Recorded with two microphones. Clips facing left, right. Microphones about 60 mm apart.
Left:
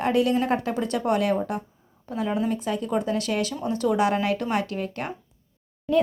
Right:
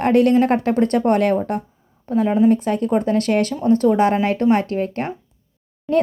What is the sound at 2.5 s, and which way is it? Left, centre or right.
A woman's voice, right.